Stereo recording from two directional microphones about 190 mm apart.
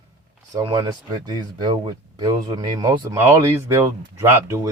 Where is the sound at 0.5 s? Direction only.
20° right (ahead or behind).